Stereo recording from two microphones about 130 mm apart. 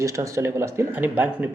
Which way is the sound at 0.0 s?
25° right (ahead or behind).